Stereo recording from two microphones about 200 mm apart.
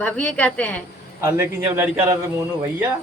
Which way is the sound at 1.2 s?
15° right (ahead or behind).